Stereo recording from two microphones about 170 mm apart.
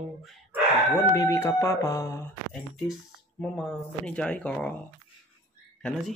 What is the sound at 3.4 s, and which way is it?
Speech, 5° left (ahead or behind).